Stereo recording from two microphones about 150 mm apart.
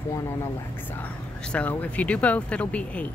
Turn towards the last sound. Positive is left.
turn(degrees=10)  # may be behind; listen again after turning